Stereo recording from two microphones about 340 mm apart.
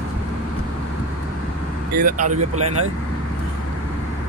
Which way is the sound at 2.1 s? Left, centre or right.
Right.